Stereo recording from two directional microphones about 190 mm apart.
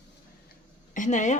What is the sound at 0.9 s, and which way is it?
Speech, 40° left (ahead or behind).